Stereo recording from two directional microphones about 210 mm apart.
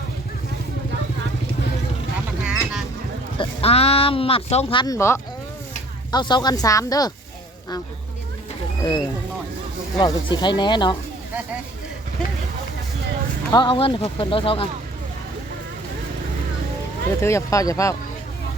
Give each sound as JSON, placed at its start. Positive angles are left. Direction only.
{"t": 2.4, "sound": "fowl", "side_deg": -5}
{"t": 3.3, "sound": "speech", "side_deg": 30}
{"t": 8.8, "sound": "speech", "side_deg": 20}
{"t": 13.5, "sound": "speech", "side_deg": 20}
{"t": 17.2, "sound": "speech", "side_deg": 15}